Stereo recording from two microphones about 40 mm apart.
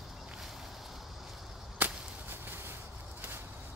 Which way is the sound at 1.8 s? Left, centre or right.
Right.